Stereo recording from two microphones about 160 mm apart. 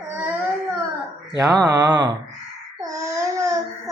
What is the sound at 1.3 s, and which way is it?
Speech, 20° right (ahead or behind).